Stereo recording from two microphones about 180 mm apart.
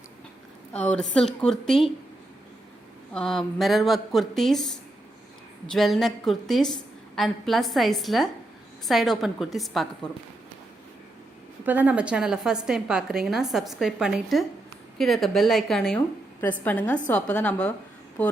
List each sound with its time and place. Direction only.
0.7 s a woman's voice: 5° left (ahead or behind)
3.1 s a woman's voice: 5° left (ahead or behind)
11.6 s a woman's voice: 10° right (ahead or behind); by 18.3 s 10° left (ahead or behind)